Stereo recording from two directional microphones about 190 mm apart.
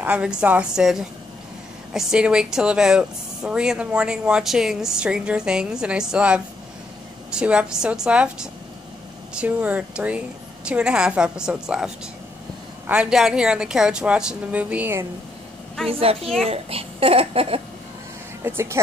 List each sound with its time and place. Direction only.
0.0 s speech: 5° right (ahead or behind)
15.9 s a child's voice: 30° right (ahead or behind)
18.4 s speech: 15° right (ahead or behind)